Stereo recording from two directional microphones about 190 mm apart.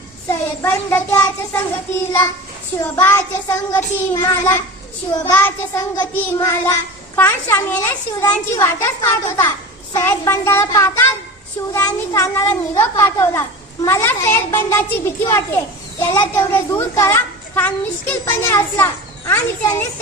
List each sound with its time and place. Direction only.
0.3 s a child's voice: 10° left (ahead or behind)
2.8 s a child's voice: 15° left (ahead or behind)